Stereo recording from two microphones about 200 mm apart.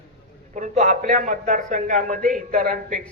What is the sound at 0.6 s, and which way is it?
A man's voice, 35° right (ahead or behind).